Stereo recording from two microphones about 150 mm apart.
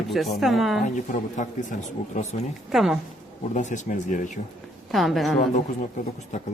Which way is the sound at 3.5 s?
55° left (ahead or behind).